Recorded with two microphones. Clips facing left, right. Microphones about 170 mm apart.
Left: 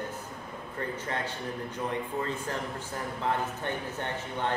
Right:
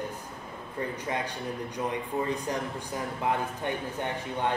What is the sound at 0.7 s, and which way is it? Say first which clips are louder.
Speech: right 2 dB; 15° right (ahead or behind).